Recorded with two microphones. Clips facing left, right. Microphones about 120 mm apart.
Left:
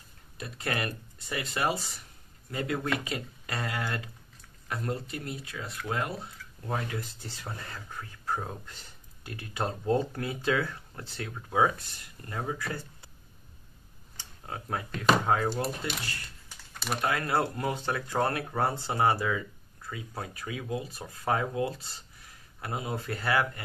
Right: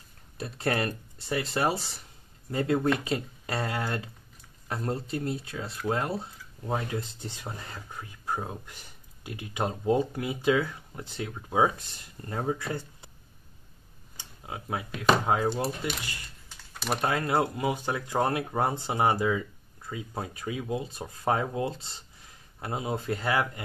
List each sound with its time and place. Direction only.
0.4 s speech: 30° right (ahead or behind)
14.1 s speech: 10° right (ahead or behind)
16.7 s typing: centre (ahead or behind)
17.0 s speech: 25° right (ahead or behind)